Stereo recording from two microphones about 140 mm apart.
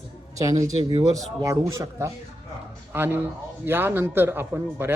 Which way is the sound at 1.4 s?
20° right (ahead or behind).